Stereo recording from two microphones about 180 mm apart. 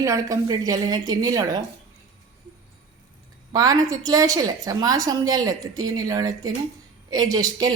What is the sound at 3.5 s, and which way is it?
A woman's voice, 20° right (ahead or behind).